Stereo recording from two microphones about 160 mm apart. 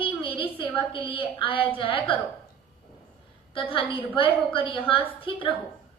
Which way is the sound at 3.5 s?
35° left (ahead or behind).